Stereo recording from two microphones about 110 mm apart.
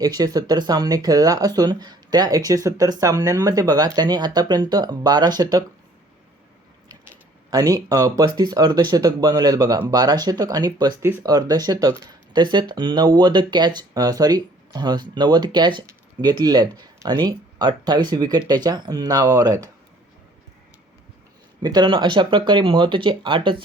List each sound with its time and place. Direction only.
0.0 s speech: 35° right (ahead or behind)
7.5 s speech: 35° right (ahead or behind)
21.6 s speech: 40° right (ahead or behind)